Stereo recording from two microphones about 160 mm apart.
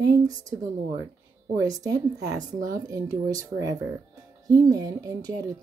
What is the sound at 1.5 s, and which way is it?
Speech, 25° right (ahead or behind).